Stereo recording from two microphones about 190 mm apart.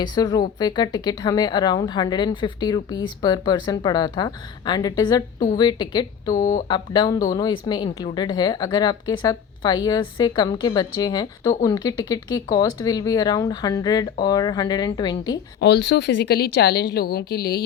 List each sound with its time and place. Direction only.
0.0 s a woman's voice: 20° left (ahead or behind)
6.3 s speech: 45° left (ahead or behind)
6.7 s a woman's voice: 25° left (ahead or behind)
15.6 s a woman's voice: 60° left (ahead or behind)